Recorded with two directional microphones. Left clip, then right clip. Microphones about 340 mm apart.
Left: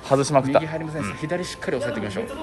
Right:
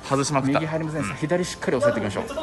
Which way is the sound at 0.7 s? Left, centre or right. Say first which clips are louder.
Right 2 dB; right.